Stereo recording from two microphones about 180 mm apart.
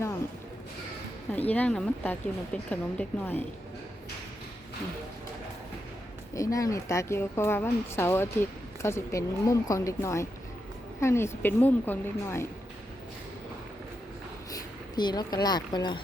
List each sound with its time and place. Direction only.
1.3 s speech: 10° left (ahead or behind)
6.3 s speech: 20° left (ahead or behind)
14.5 s a sound: 25° left (ahead or behind)
15.4 s speech: 25° left (ahead or behind)